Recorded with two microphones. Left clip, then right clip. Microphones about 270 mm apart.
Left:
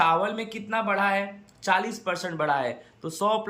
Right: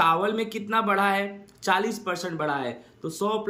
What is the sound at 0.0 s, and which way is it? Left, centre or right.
Speech, centre.